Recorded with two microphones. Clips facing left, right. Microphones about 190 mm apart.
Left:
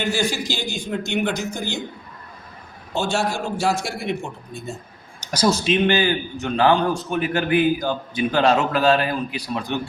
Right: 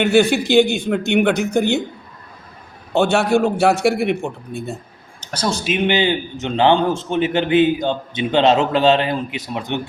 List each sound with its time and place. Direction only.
0.0 s a man's voice: 60° right (ahead or behind)
2.9 s a man's voice: 60° right (ahead or behind)
5.3 s speech: 5° left (ahead or behind); by 6.0 s 10° right (ahead or behind)
6.0 s a man's voice: 20° right (ahead or behind)